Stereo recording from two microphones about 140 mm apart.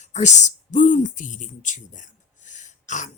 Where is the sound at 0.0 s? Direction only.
55° left (ahead or behind).